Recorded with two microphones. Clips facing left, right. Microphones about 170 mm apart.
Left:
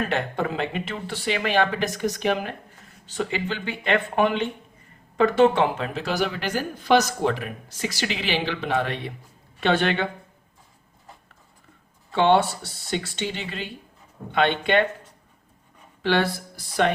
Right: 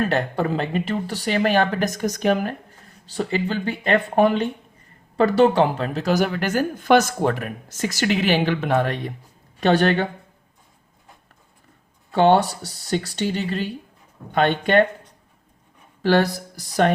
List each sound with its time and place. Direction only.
0.1 s speech: 40° right (ahead or behind)
12.1 s speech: 40° right (ahead or behind)
16.0 s speech: 40° right (ahead or behind)